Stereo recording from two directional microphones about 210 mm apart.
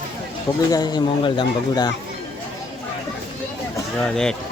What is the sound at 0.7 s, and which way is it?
Speech, 20° left (ahead or behind).